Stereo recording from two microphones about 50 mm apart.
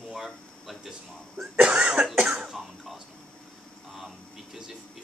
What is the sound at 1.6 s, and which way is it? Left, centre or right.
Cough, right.